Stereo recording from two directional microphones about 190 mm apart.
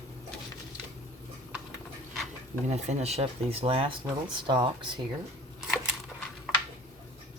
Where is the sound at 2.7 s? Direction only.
35° right (ahead or behind).